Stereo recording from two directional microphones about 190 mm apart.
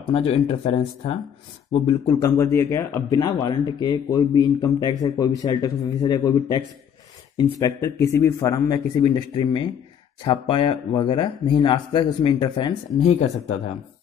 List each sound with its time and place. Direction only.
0.1 s a man's voice: 30° left (ahead or behind)
13.0 s speech: 35° left (ahead or behind)